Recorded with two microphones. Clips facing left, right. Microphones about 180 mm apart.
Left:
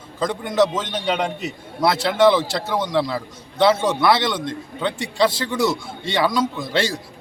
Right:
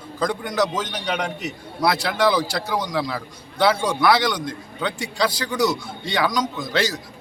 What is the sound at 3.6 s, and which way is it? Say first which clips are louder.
A man's voice: left 2 dB; 25° left (ahead or behind).